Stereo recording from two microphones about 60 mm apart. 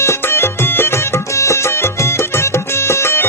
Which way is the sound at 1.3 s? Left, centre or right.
Left.